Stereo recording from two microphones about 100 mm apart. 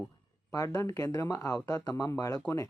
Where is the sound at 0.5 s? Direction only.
30° left (ahead or behind).